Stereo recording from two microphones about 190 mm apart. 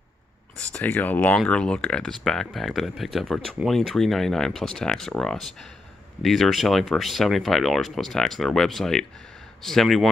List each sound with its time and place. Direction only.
0.7 s speech: 10° left (ahead or behind)